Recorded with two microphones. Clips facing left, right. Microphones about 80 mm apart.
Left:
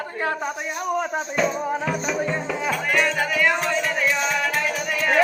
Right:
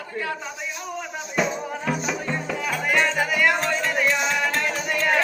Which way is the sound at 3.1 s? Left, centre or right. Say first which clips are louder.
Even; centre.